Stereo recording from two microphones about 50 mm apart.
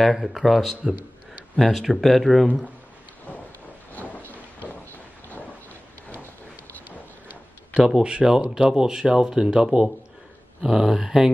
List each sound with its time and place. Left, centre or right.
0.0 s speech: centre
3.9 s a sound: left
7.7 s speech: centre